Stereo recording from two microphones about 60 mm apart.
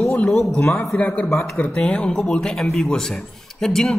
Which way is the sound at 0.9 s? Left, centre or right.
Left.